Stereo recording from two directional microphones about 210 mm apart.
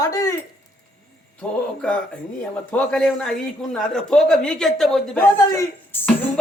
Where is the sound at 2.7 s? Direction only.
5° left (ahead or behind).